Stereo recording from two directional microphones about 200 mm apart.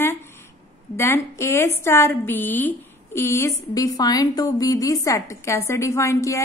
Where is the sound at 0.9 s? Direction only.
10° left (ahead or behind).